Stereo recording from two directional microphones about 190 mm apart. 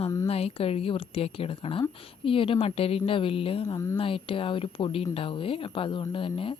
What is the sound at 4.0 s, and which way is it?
Speech, 30° left (ahead or behind).